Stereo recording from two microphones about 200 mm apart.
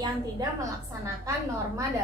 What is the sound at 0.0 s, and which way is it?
A woman's voice, 15° right (ahead or behind).